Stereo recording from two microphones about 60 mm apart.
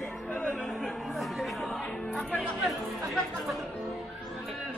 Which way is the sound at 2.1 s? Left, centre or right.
Left.